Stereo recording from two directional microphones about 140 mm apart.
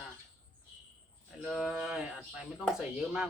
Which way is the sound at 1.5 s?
Centre (ahead or behind).